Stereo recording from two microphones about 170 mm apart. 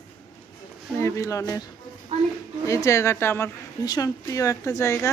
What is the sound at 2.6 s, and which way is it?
A woman's voice, 20° left (ahead or behind).